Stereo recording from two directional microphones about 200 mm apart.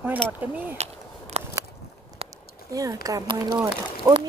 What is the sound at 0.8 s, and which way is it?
Speech, 35° right (ahead or behind).